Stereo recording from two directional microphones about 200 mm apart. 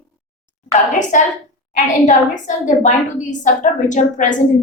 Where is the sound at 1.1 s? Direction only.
40° left (ahead or behind).